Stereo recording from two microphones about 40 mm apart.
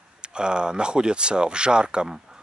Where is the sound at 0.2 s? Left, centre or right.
Right.